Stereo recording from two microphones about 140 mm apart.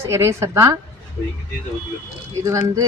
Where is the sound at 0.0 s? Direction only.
20° right (ahead or behind).